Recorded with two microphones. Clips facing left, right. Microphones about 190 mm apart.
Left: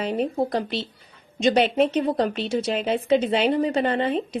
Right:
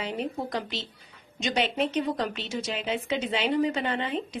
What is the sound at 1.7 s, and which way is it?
Speech, 50° left (ahead or behind).